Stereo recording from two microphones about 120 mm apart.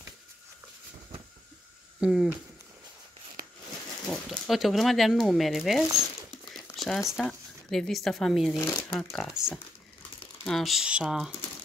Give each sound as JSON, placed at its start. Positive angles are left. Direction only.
{"t": 2.0, "sound": "speech", "side_deg": -5}
{"t": 4.1, "sound": "speech", "side_deg": 0}